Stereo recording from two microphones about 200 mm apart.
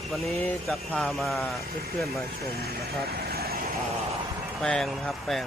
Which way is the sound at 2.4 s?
50° right (ahead or behind).